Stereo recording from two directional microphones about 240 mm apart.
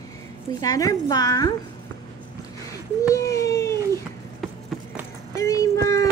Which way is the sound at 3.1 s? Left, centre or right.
Centre.